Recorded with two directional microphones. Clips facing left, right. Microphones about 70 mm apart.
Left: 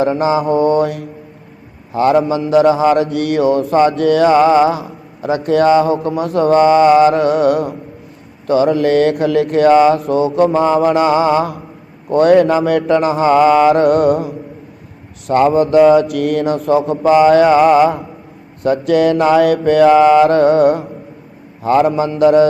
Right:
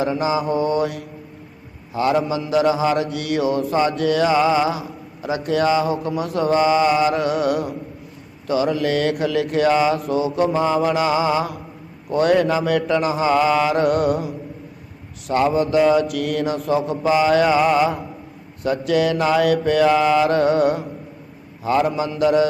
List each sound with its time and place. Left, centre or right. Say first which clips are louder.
0.0 s speech: left 6 dB; left
15.3 s speech: left 7 dB; left
18.6 s speech: left 6 dB; left